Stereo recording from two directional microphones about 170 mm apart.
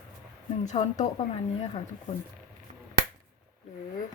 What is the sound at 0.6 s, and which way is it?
Speech, 45° left (ahead or behind).